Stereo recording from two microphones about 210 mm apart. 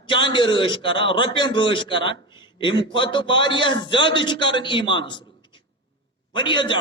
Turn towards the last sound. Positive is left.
turn(degrees=20)  # may be behind; listen again after turning